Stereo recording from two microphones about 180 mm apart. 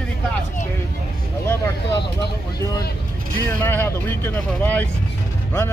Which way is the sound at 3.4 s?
10° left (ahead or behind).